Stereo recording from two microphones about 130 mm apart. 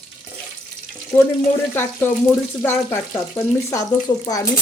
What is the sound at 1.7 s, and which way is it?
A woman's voice, 15° left (ahead or behind).